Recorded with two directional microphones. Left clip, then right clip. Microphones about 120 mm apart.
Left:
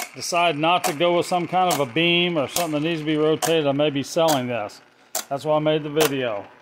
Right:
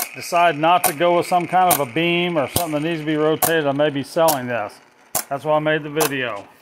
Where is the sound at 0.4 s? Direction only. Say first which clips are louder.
Right 4 dB; 15° left (ahead or behind).